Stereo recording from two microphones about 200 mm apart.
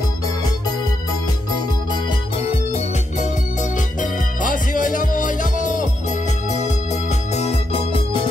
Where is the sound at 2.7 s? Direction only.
35° left (ahead or behind).